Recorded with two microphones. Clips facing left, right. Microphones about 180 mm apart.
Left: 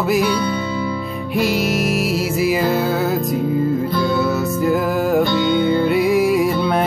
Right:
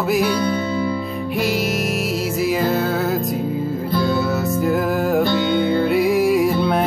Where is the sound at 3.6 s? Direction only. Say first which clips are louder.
Left 3 dB; centre (ahead or behind).